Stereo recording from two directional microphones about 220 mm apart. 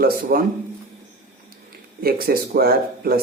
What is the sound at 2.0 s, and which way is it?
A man's voice, 45° right (ahead or behind).